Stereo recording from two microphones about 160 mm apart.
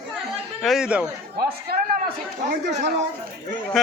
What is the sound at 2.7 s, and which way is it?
Speech, 45° right (ahead or behind).